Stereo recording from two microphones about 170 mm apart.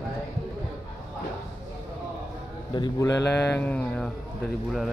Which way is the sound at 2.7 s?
20° left (ahead or behind).